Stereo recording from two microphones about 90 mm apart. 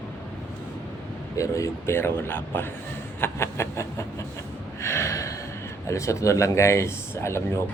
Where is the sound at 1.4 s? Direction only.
35° left (ahead or behind).